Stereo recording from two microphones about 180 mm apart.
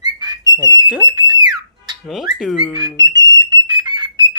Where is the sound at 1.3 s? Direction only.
25° right (ahead or behind).